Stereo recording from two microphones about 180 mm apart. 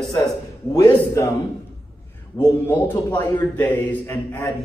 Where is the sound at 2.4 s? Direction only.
15° left (ahead or behind).